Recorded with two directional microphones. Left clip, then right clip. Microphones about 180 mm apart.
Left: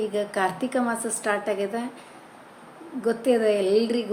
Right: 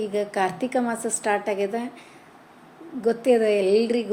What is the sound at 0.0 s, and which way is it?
A woman's voice, 25° right (ahead or behind).